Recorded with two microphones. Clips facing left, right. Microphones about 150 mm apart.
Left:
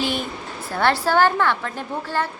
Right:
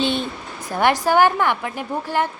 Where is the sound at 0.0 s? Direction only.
25° right (ahead or behind).